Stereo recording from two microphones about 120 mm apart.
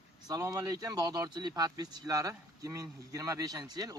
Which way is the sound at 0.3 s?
35° right (ahead or behind).